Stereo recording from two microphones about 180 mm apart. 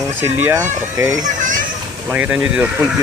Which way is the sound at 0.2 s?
10° right (ahead or behind).